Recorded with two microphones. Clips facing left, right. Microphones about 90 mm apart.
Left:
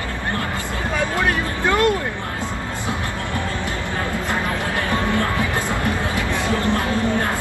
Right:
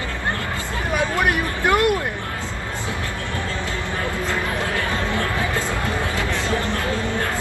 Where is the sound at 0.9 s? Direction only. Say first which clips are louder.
Right 1 dB; 15° right (ahead or behind).